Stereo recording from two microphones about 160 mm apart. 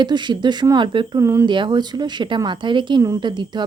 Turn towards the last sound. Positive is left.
turn(degrees=-30)  # may be behind; listen again after turning